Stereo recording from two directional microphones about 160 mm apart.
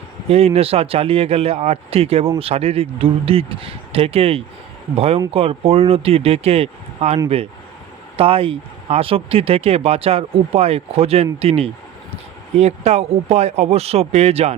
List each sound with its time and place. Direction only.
0.3 s speech: 40° right (ahead or behind)